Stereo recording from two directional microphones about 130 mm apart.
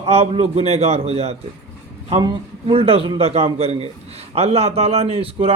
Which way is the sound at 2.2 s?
40° right (ahead or behind).